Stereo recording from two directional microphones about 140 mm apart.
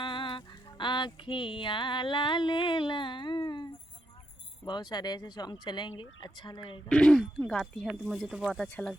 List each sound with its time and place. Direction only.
0.0 s a sound: 35° left (ahead or behind)
4.6 s speech: 30° left (ahead or behind)
6.8 s speech: 5° left (ahead or behind)